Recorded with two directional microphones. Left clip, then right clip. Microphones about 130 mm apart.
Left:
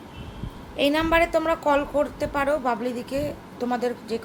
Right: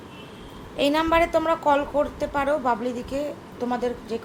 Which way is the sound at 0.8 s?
Centre (ahead or behind).